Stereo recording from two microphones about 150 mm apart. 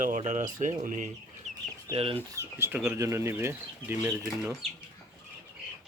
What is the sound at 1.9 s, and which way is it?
Speech, 40° right (ahead or behind).